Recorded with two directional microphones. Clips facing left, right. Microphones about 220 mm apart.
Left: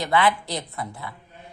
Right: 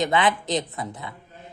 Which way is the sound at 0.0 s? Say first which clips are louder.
Even; 20° right (ahead or behind).